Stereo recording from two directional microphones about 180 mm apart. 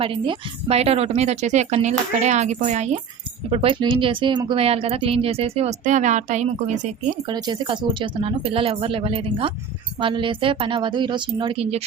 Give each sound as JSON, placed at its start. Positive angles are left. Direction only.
{"t": 0.0, "sound": "speech", "side_deg": -30}
{"t": 7.3, "sound": "speech", "side_deg": -25}